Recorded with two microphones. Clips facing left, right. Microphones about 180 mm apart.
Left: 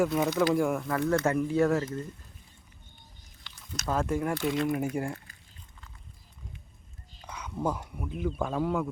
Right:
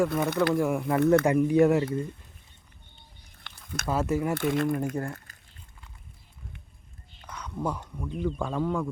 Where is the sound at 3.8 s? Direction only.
5° right (ahead or behind).